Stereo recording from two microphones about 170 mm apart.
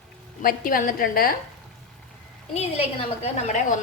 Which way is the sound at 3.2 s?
40° left (ahead or behind).